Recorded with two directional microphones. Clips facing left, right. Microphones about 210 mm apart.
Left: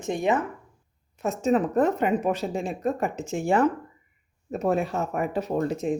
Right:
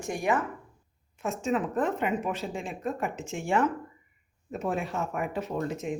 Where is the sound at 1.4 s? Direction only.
40° left (ahead or behind).